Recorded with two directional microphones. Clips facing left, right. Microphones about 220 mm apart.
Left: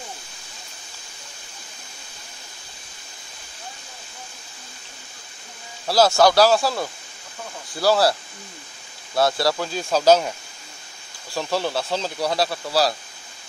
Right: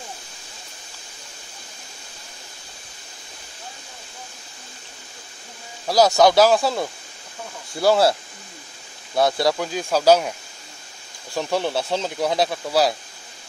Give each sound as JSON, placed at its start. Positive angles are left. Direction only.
{"t": 5.9, "sound": "speech", "side_deg": -15}
{"t": 11.3, "sound": "speech", "side_deg": -20}